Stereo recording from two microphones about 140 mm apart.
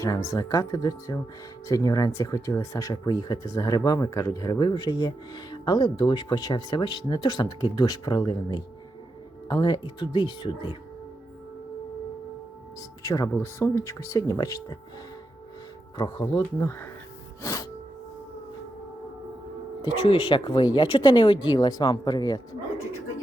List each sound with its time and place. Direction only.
0.0 s speech: 25° left (ahead or behind)
13.0 s speech: 25° left (ahead or behind)
16.0 s speech: 35° left (ahead or behind)
16.4 s speech: 15° left (ahead or behind)
17.4 s music: 25° left (ahead or behind)
19.8 s speech: 40° left (ahead or behind)